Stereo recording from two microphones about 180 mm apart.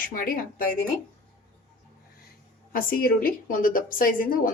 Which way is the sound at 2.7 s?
55° left (ahead or behind).